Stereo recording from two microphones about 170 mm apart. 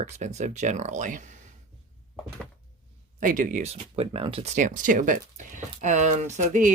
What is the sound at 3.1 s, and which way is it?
Speech, 50° right (ahead or behind).